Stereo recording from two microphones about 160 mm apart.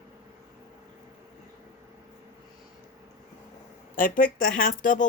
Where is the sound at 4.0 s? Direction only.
60° left (ahead or behind).